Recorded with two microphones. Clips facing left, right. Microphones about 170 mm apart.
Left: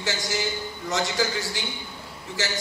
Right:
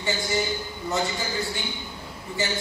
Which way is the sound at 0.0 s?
90° left.